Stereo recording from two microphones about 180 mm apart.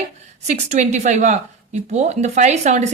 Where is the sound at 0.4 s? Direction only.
40° right (ahead or behind).